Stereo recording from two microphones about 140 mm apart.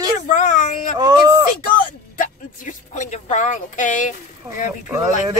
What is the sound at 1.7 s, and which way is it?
Speech, 75° left (ahead or behind).